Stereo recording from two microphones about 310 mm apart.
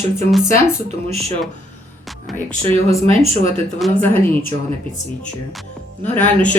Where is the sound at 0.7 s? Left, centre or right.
Centre.